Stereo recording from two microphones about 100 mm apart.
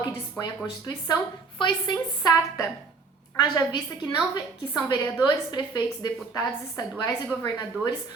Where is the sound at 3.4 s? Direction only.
50° left (ahead or behind).